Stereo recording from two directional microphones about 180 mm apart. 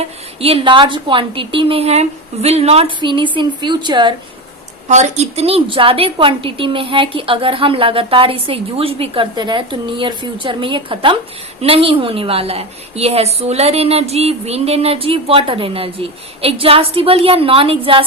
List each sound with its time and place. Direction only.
0.0 s a woman's voice: 35° right (ahead or behind)
4.9 s a woman's voice: 40° right (ahead or behind)